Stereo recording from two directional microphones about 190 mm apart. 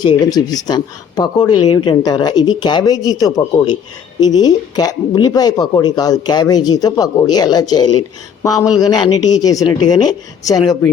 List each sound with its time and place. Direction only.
0.0 s speech: 20° left (ahead or behind)